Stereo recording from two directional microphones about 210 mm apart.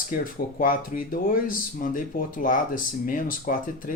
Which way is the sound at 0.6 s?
40° left (ahead or behind).